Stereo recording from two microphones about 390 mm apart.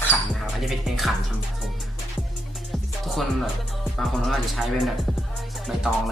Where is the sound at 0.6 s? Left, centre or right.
Centre.